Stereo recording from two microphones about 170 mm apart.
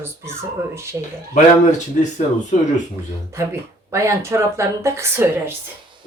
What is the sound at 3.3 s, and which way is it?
Speech, 15° right (ahead or behind).